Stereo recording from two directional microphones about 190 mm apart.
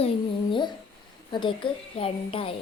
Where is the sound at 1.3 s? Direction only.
25° left (ahead or behind).